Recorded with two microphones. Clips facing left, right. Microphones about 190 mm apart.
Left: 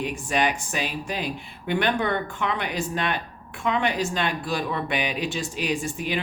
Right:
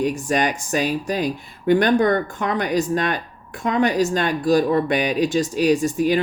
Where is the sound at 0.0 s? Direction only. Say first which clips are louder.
Right 5 dB; 45° right (ahead or behind).